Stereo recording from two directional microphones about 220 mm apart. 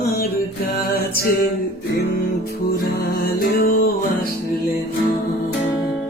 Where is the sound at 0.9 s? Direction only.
40° left (ahead or behind).